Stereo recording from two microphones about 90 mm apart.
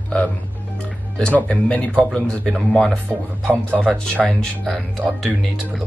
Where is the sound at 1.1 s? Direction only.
15° left (ahead or behind).